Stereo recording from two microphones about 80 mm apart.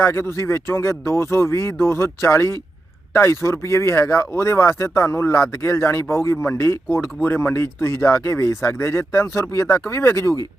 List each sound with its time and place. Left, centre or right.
0.0 s speech: left